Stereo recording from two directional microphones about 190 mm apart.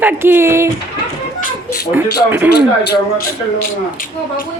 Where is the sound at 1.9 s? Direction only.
10° right (ahead or behind).